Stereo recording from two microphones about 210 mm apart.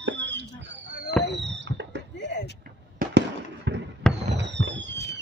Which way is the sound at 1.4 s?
55° right (ahead or behind).